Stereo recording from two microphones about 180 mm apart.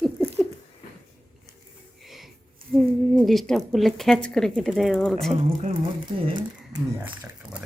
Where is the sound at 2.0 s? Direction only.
Centre (ahead or behind).